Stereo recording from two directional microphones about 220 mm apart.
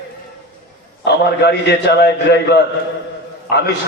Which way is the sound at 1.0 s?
50° left (ahead or behind).